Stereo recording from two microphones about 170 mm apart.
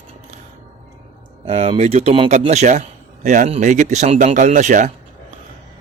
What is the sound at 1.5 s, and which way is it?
Speech, 35° right (ahead or behind).